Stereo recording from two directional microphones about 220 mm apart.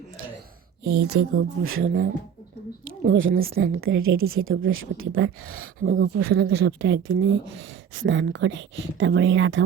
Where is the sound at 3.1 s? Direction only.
60° right (ahead or behind).